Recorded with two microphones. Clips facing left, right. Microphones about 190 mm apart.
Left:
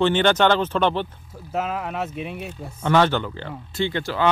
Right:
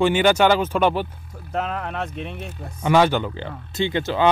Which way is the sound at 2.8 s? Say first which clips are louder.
Right 1 dB; 10° right (ahead or behind).